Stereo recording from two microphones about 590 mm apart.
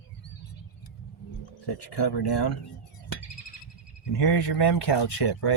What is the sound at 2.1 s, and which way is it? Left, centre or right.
Speech, left.